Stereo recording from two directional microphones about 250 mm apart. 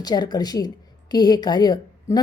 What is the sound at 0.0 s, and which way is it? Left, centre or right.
A woman's voice, centre.